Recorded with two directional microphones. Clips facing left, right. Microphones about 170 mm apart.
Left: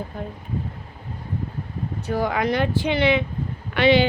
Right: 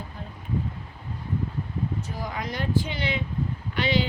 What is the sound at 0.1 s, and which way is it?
Speech, 55° left (ahead or behind).